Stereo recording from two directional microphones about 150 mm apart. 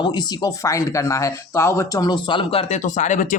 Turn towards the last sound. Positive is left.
turn(degrees=55)  # may be behind; listen again after turning